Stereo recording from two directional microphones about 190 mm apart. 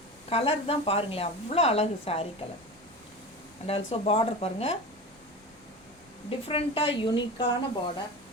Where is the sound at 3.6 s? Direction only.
30° left (ahead or behind).